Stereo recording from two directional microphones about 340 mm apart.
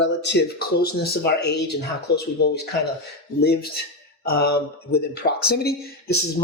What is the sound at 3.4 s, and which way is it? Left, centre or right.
Speech, left.